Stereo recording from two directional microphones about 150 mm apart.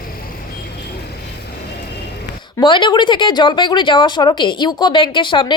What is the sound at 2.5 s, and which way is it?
Speech, 30° left (ahead or behind).